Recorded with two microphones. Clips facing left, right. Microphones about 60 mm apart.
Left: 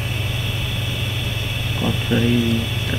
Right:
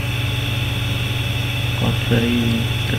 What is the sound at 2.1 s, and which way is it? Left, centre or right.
Speech, right.